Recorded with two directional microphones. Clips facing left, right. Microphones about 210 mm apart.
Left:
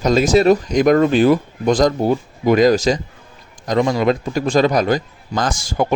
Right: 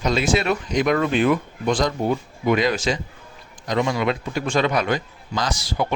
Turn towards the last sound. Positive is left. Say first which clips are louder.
# left 5 dB
turn(degrees=45)  # may be behind; listen again after turning